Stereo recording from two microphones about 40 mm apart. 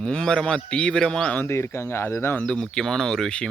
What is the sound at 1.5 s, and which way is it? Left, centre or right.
Speech, left.